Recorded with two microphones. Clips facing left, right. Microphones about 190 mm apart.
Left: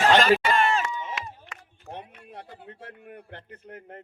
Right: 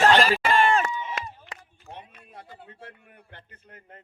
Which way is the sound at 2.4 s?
55° left (ahead or behind).